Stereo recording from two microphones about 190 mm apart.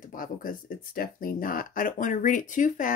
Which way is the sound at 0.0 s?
45° left (ahead or behind).